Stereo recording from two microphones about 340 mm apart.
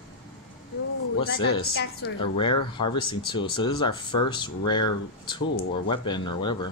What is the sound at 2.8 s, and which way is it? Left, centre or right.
Speech, centre.